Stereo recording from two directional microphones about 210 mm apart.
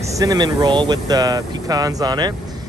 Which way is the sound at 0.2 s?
20° right (ahead or behind).